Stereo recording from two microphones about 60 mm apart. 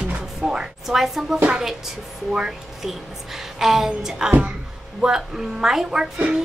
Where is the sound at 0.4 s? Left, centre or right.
Centre.